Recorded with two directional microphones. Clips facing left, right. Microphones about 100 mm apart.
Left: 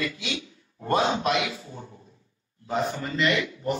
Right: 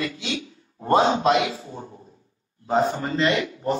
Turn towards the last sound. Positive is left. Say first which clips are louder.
# right 3 dB
turn(degrees=-35)  # may be behind; listen again after turning